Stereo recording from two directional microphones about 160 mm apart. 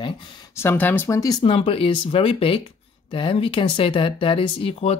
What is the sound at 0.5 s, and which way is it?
Speech, 15° left (ahead or behind).